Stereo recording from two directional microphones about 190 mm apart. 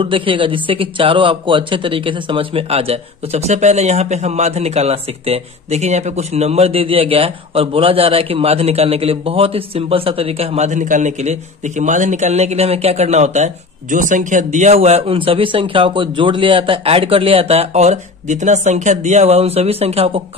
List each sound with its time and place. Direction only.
0.0 s speech: 25° right (ahead or behind)